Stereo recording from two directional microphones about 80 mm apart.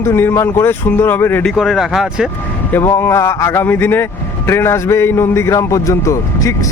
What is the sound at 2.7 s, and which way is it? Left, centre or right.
Speech, left.